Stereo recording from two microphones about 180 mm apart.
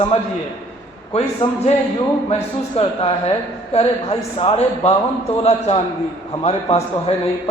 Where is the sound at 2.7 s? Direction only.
35° left (ahead or behind).